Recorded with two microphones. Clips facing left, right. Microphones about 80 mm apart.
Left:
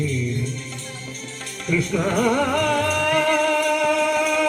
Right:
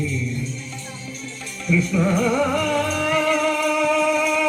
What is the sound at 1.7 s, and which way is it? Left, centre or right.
Music, left.